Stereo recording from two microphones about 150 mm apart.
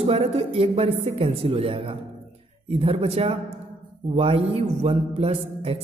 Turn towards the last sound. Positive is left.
turn(degrees=-40)  # may be behind; listen again after turning